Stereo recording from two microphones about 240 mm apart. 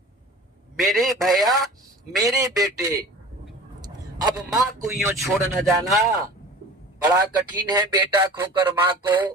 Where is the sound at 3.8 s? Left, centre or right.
Centre.